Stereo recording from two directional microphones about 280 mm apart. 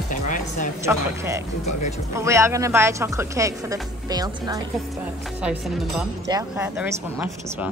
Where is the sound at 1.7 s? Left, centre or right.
Left.